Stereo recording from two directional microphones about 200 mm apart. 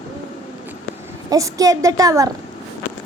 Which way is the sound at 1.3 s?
15° right (ahead or behind).